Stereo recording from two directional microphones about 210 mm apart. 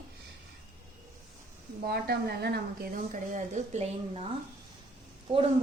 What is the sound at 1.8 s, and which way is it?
Speech, 50° right (ahead or behind).